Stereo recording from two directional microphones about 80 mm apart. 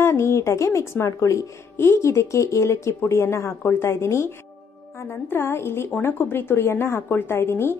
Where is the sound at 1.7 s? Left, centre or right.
Left.